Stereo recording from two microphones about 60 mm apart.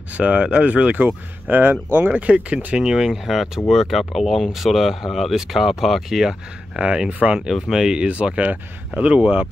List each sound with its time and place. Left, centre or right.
0.2 s speech: centre
1.0 s speech: right
2.8 s speech: centre
6.8 s speech: centre
7.3 s speech: centre
7.8 s speech: centre